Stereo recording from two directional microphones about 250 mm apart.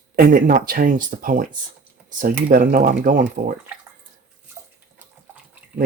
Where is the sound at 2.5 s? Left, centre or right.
Right.